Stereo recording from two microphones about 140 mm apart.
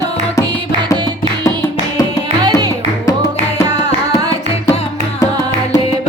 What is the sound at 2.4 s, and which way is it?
Music, 30° right (ahead or behind).